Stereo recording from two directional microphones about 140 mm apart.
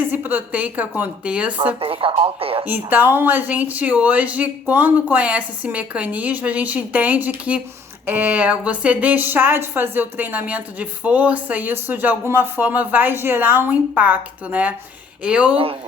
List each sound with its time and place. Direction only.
0.1 s speech: 15° right (ahead or behind)
1.8 s speech: 40° right (ahead or behind)
2.6 s speech: 15° right (ahead or behind)
15.5 s speech: 40° right (ahead or behind)